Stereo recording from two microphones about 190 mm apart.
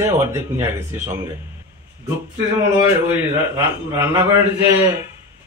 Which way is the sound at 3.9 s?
15° right (ahead or behind).